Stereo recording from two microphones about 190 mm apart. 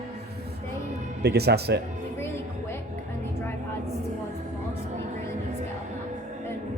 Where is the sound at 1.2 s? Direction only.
60° right (ahead or behind).